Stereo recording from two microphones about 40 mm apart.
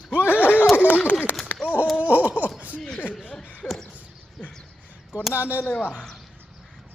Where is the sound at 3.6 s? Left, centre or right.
Left.